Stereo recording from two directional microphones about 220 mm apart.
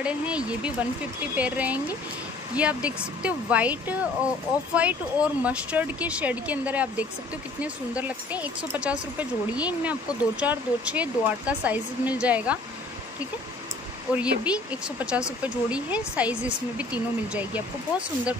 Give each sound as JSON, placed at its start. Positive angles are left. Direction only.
{"t": 0.0, "sound": "speech", "side_deg": -5}
{"t": 14.1, "sound": "speech", "side_deg": -5}